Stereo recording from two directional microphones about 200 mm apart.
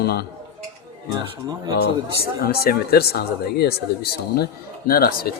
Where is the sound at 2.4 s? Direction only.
50° left (ahead or behind).